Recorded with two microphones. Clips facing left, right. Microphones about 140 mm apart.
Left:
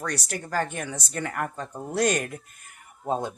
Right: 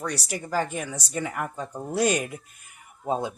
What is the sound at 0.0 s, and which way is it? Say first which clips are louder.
Speech: right 1 dB; 10° right (ahead or behind).